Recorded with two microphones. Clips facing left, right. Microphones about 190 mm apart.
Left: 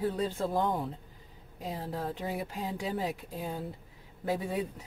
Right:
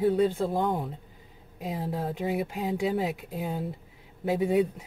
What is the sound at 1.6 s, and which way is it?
Speech, 15° right (ahead or behind).